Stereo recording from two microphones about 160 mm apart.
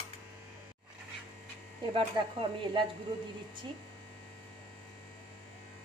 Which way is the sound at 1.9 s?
35° right (ahead or behind).